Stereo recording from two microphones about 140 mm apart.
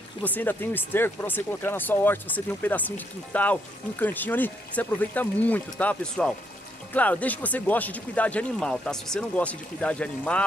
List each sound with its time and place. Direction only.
0.2 s speech: 15° left (ahead or behind)